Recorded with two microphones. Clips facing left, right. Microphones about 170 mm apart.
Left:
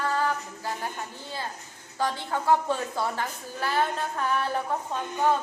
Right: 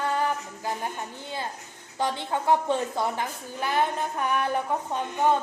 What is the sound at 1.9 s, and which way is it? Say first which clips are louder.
A woman's voice: right 1 dB; 20° right (ahead or behind).